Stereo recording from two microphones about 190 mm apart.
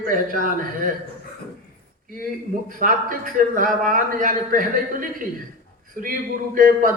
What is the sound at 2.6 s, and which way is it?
A man's voice, 45° right (ahead or behind).